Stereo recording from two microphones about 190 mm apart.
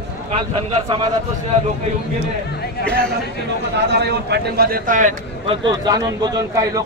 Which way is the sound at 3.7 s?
60° right (ahead or behind).